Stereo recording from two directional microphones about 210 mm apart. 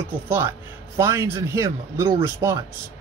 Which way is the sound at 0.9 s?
15° right (ahead or behind).